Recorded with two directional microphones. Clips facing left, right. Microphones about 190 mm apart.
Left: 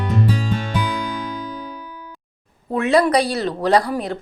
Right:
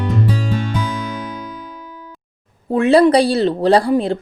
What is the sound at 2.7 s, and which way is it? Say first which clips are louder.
Speech: right 5 dB; 30° right (ahead or behind).